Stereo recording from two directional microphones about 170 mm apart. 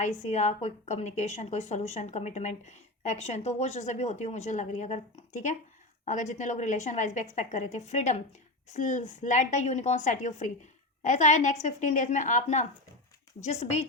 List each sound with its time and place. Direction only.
0.0 s a woman's voice: 40° left (ahead or behind)